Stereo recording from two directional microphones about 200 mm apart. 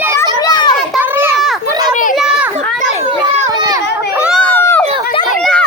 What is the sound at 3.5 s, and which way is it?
Run, 20° right (ahead or behind).